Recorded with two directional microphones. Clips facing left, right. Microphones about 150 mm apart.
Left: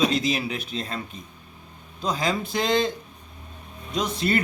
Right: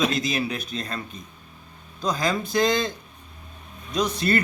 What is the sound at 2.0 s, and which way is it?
Speech, 25° left (ahead or behind).